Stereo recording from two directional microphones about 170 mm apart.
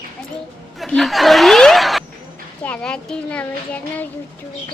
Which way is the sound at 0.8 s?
Centre (ahead or behind).